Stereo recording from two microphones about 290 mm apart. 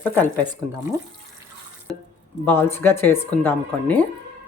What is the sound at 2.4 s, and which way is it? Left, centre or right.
Speech, centre.